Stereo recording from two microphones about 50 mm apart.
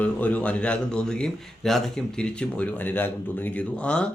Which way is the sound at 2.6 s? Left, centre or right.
Left.